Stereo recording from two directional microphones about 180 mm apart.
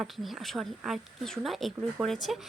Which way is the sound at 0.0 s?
Centre (ahead or behind).